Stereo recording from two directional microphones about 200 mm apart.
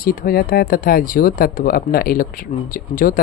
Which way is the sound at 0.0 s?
45° left (ahead or behind).